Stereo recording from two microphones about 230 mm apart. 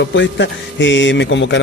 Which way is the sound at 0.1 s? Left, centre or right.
Left.